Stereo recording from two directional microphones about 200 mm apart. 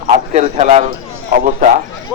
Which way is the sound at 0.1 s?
35° right (ahead or behind).